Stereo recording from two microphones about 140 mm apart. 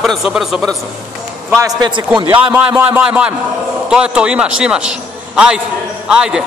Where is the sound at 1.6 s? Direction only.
30° right (ahead or behind).